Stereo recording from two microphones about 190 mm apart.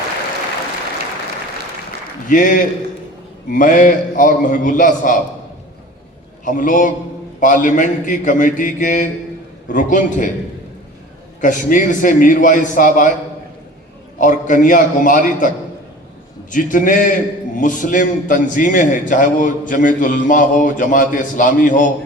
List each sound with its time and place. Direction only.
2.3 s a man's voice: 45° left (ahead or behind)
6.4 s a man's voice: 45° left (ahead or behind)
11.3 s a man's voice: 45° left (ahead or behind)
14.2 s a man's voice: 45° left (ahead or behind)
16.5 s a man's voice: 45° left (ahead or behind)